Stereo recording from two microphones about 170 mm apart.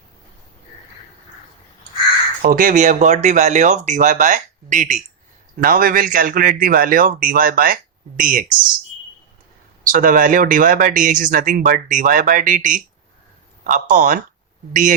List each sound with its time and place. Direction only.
2.4 s a man's voice: 55° right (ahead or behind)
9.8 s speech: 55° right (ahead or behind)